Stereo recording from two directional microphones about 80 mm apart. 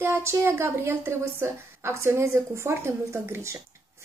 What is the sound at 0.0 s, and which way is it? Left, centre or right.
A woman's voice, right.